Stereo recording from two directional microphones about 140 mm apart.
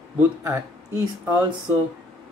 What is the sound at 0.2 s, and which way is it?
Speech, 15° right (ahead or behind).